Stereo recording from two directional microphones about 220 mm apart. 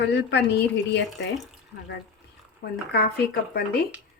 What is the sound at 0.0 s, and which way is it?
Speech, 50° left (ahead or behind).